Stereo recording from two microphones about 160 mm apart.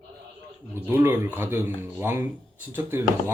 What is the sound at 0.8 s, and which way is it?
Speech, 15° right (ahead or behind).